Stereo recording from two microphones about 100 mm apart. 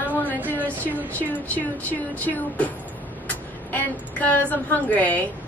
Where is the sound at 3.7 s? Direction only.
15° left (ahead or behind).